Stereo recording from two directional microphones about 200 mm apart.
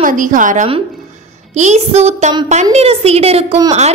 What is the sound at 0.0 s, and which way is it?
A woman's voice, 40° right (ahead or behind).